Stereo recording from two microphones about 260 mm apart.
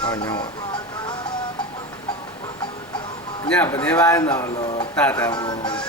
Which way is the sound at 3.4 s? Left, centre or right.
Centre.